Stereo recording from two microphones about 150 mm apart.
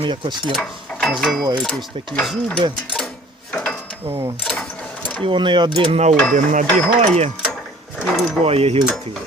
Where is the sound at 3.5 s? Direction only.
5° left (ahead or behind).